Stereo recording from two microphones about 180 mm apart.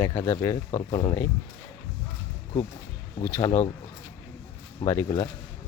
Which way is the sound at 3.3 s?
15° left (ahead or behind).